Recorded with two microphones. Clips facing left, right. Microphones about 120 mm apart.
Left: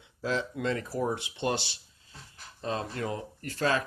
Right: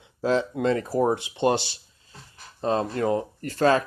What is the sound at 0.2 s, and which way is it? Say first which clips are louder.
Speech: right 8 dB; 40° right (ahead or behind).